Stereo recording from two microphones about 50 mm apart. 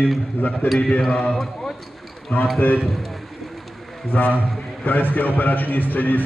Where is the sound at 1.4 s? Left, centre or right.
Centre.